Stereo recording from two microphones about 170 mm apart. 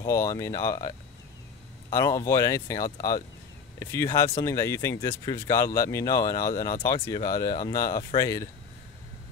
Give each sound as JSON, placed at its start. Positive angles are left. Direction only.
{"t": 0.0, "sound": "speech", "side_deg": 15}